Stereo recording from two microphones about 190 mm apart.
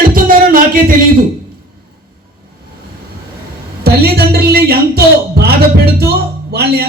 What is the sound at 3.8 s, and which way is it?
A man's voice, 55° right (ahead or behind).